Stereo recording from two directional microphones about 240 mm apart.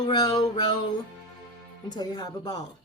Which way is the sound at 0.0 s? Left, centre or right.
Centre.